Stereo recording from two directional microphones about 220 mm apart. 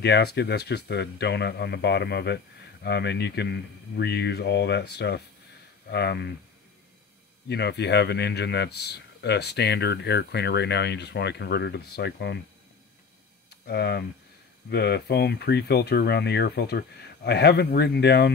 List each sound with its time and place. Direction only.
0.0 s speech: 50° left (ahead or behind)
7.4 s speech: 50° left (ahead or behind)
13.7 s speech: 50° left (ahead or behind)